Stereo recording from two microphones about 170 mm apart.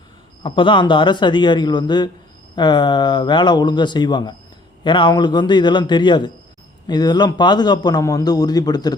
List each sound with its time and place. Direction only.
0.4 s a man's voice: 30° left (ahead or behind)